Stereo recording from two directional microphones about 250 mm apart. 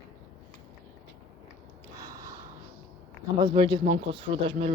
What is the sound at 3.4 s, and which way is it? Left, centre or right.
Speech, centre.